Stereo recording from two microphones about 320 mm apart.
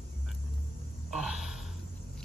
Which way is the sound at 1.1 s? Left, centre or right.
Centre.